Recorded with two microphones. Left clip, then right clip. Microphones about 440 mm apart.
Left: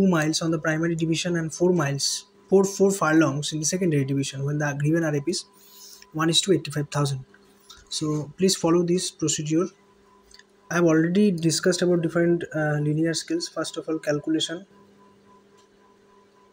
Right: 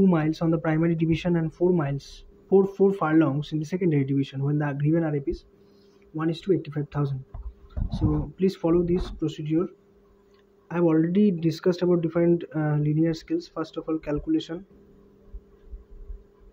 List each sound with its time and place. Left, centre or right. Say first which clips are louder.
0.0 s speech: left 1 dB; right
8.4 s speech: left 2 dB; right
10.7 s speech: left 2 dB; right